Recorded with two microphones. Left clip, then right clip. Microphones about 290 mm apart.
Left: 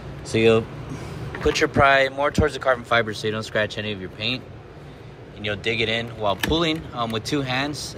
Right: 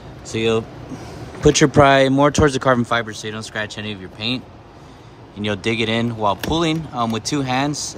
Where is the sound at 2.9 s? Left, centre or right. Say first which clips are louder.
Left 1 dB; centre.